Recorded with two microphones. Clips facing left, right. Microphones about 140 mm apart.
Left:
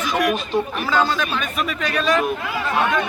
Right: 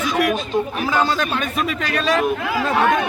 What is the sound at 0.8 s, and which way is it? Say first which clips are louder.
Speech: even; 15° right (ahead or behind).